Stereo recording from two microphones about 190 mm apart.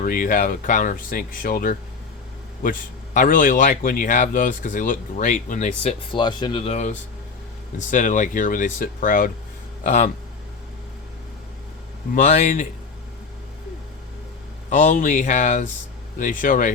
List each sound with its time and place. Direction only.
0.0 s a man's voice: 45° left (ahead or behind)
12.1 s speech: 40° left (ahead or behind)
14.7 s speech: 40° left (ahead or behind)